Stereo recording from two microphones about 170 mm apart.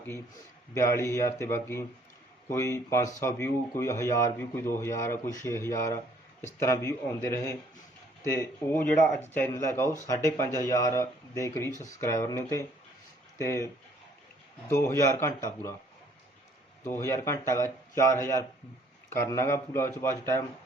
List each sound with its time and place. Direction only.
0.7 s speech: 15° left (ahead or behind)
14.7 s speech: 15° left (ahead or behind)
16.8 s speech: 15° left (ahead or behind)